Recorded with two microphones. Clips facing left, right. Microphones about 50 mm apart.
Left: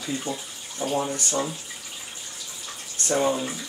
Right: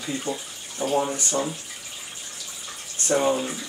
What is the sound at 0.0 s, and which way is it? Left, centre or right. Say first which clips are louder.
Bathtub: right 1 dB; centre.